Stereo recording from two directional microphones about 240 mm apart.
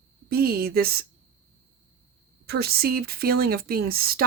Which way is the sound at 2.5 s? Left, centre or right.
Right.